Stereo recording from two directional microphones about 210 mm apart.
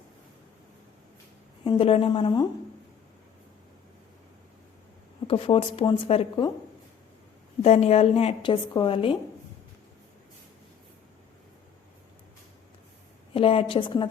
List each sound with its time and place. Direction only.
1.6 s a woman's voice: 25° left (ahead or behind)
5.3 s a woman's voice: 25° left (ahead or behind)
7.6 s a woman's voice: 30° left (ahead or behind)
13.3 s a woman's voice: 25° left (ahead or behind)